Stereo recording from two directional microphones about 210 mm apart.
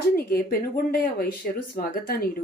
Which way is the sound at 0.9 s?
45° left (ahead or behind).